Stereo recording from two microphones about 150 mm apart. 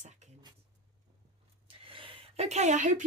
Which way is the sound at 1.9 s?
35° right (ahead or behind).